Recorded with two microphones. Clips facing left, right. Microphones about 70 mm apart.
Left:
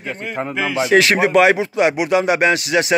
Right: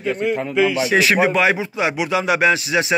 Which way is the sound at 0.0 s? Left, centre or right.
Left.